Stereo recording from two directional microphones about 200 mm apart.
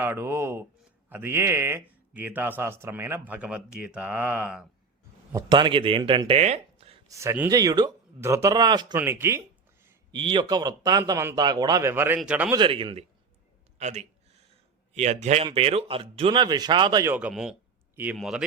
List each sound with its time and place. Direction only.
0.0 s a man's voice: 10° right (ahead or behind)
5.3 s speech: 20° right (ahead or behind)
7.1 s a man's voice: 15° right (ahead or behind)
10.1 s a man's voice: 25° right (ahead or behind); by 12.5 s 5° right (ahead or behind)
12.5 s a man's voice: 25° right (ahead or behind)
13.7 s a sound: 35° right (ahead or behind)
14.9 s a man's voice: 35° right (ahead or behind)
17.1 s speech: 5° right (ahead or behind)